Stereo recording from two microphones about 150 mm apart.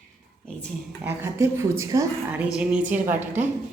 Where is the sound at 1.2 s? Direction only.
20° right (ahead or behind).